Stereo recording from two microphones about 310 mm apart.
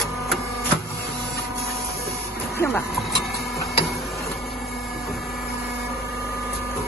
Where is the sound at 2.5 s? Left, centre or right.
Centre.